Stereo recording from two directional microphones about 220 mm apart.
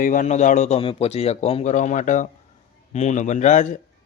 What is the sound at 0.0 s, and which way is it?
Speech, 35° left (ahead or behind).